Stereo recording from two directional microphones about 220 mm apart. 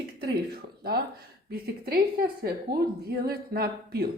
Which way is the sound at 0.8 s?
45° right (ahead or behind).